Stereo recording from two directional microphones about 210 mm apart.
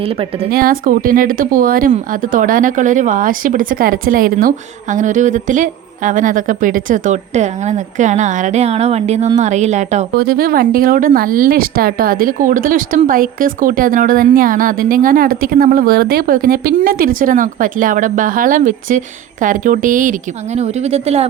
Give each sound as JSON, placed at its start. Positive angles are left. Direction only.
{"t": 0.5, "sound": "speech", "side_deg": -45}
{"t": 10.2, "sound": "speech", "side_deg": -45}